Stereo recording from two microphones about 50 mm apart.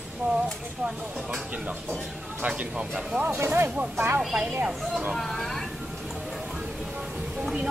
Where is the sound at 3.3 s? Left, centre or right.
Right.